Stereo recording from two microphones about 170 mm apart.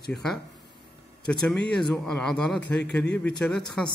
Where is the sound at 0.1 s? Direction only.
Centre (ahead or behind).